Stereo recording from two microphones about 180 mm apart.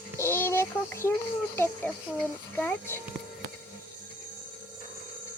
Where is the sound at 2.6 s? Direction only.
10° left (ahead or behind).